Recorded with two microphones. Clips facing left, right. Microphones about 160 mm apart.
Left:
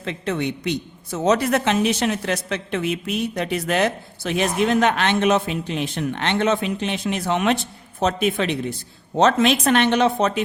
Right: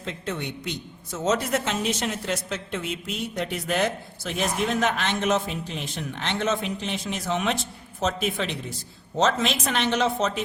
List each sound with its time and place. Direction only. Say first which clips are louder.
0.0 s a woman's voice: left 7 dB; 70° left (ahead or behind)